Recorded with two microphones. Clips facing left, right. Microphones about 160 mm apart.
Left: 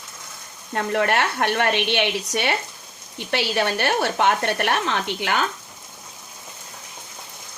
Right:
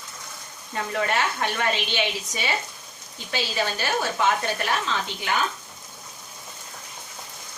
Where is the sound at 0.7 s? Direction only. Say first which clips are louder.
Left 5 dB; 60° left (ahead or behind).